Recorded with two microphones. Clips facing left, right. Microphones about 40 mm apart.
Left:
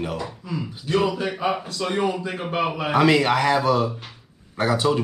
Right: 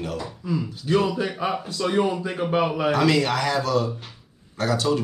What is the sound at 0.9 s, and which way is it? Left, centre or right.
A man's voice, centre.